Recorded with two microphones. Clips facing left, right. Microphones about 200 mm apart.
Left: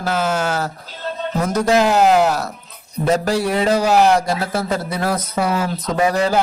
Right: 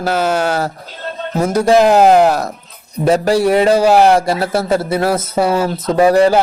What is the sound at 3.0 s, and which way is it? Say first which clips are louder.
A man's voice: right 6 dB; 10° right (ahead or behind).